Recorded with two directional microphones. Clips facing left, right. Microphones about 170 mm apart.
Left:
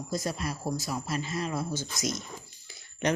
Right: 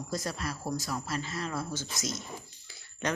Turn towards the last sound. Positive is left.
turn(degrees=20)  # may be behind; listen again after turning